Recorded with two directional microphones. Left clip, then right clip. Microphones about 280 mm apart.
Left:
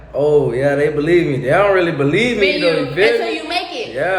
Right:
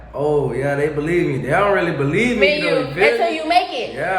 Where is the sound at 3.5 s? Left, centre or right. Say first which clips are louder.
Right 7 dB; right.